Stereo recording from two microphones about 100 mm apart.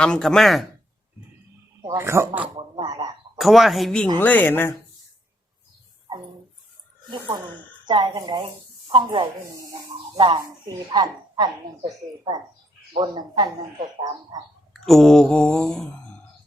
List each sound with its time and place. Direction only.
0.0 s speech: 5° left (ahead or behind)
1.9 s speech: 25° right (ahead or behind)
2.6 s speech: 55° right (ahead or behind)
2.9 s speech: 40° right (ahead or behind)
3.3 s speech: centre (ahead or behind)
4.2 s speech: 15° left (ahead or behind)
8.0 s speech: 35° right (ahead or behind)
10.2 s a woman's voice: 60° right (ahead or behind)
10.9 s a woman's voice: 45° right (ahead or behind)
14.7 s speech: centre (ahead or behind)